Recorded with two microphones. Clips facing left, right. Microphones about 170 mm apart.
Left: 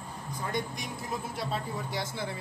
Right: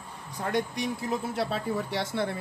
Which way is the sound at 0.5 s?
70° right (ahead or behind).